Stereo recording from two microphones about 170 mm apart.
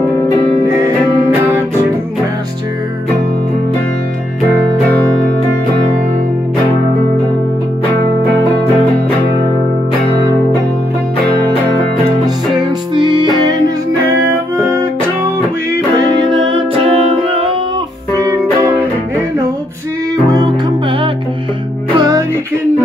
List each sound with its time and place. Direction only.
12.9 s music: 25° right (ahead or behind)
15.2 s music: 20° right (ahead or behind)
20.2 s music: 25° right (ahead or behind)
21.9 s music: 25° right (ahead or behind)